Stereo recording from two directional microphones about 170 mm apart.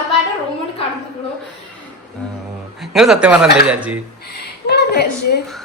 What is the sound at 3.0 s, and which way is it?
A man's voice, 5° right (ahead or behind).